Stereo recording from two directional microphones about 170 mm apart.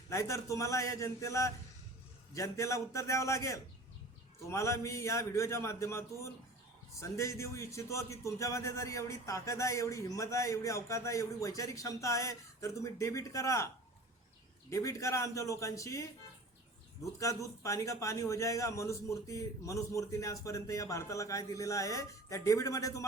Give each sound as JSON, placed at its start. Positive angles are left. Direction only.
{"t": 0.1, "sound": "a man's voice", "side_deg": 15}
{"t": 14.7, "sound": "a man's voice", "side_deg": 20}
{"t": 17.2, "sound": "a man's voice", "side_deg": 20}